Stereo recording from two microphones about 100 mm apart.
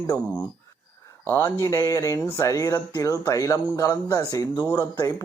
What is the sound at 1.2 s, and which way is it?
Speech, 20° left (ahead or behind).